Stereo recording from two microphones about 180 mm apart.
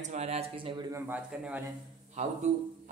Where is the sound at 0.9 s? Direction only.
15° right (ahead or behind).